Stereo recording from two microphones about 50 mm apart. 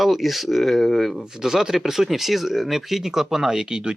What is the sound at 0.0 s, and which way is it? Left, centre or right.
Speech, centre.